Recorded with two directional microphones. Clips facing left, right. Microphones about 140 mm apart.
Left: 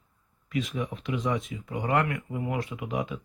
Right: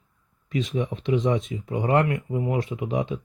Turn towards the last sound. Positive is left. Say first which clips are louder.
# right 5 dB
turn(degrees=-25)  # may be behind; listen again after turning